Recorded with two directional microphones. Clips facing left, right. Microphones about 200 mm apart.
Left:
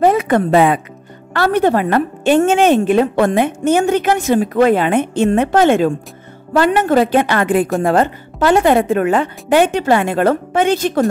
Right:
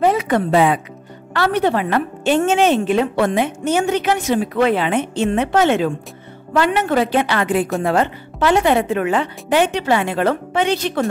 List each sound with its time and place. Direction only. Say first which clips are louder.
0.0 s a woman's voice: left 3 dB; 50° left (ahead or behind)